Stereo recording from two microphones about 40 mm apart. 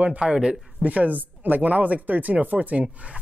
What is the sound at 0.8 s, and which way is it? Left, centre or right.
Speech, right.